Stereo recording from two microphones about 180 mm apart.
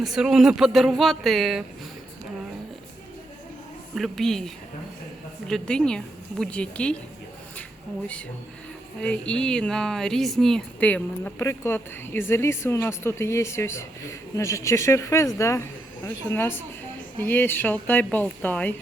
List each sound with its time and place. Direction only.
0.0 s speech: centre (ahead or behind)
3.9 s speech: centre (ahead or behind)
9.0 s speech: 5° left (ahead or behind)